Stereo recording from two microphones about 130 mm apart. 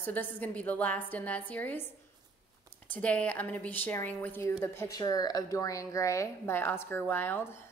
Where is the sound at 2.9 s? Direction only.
10° left (ahead or behind).